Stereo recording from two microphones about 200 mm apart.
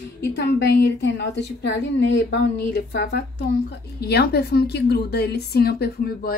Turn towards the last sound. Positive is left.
turn(degrees=50)  # may be behind; listen again after turning